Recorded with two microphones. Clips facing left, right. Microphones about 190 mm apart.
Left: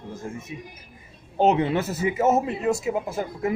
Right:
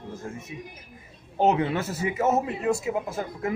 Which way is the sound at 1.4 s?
25° left (ahead or behind).